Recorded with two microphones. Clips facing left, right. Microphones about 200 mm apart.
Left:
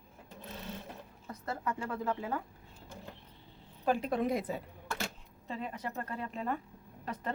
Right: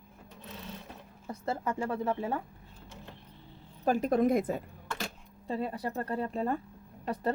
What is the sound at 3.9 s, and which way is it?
Speech, 45° right (ahead or behind).